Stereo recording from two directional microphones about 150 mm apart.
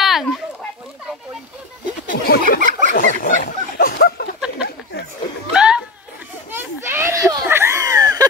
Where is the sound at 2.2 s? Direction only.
85° left.